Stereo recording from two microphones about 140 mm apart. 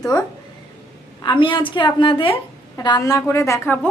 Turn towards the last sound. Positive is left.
turn(degrees=20)  # may be behind; listen again after turning